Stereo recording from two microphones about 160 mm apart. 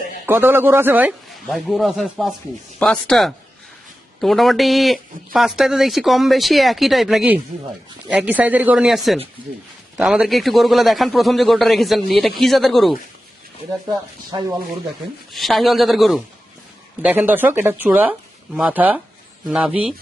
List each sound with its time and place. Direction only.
0.3 s speech: 15° right (ahead or behind)
1.5 s speech: centre (ahead or behind)
14.3 s speech: 25° right (ahead or behind)
15.3 s speech: centre (ahead or behind)